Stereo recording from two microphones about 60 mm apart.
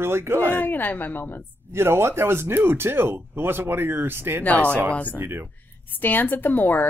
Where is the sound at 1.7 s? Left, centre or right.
Right.